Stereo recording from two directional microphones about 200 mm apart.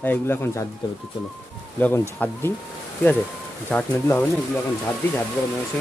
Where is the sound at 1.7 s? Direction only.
10° left (ahead or behind).